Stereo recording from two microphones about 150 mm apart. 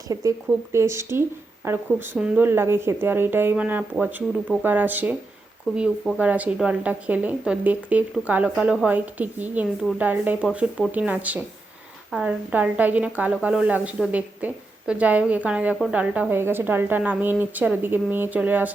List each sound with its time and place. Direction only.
0.1 s speech: 20° right (ahead or behind)